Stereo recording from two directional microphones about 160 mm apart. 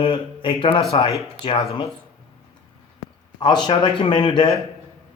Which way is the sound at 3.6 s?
30° left (ahead or behind).